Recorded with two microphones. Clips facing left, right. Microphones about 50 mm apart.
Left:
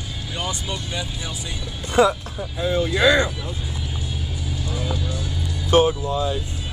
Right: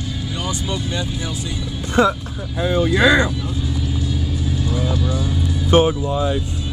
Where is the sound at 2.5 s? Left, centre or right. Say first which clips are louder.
Right 4 dB; centre.